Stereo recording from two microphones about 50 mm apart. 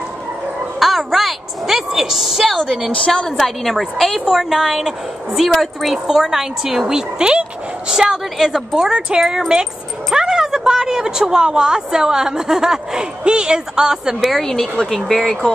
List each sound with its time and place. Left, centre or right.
0.7 s a sound: centre
2.5 s a woman's voice: centre
14.4 s a woman's voice: centre